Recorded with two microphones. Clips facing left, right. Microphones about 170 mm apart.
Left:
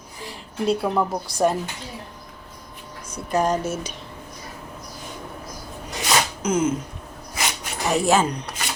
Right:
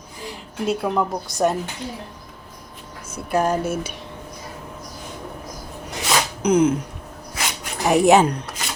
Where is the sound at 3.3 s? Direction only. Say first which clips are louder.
Right 1 dB; 5° right (ahead or behind).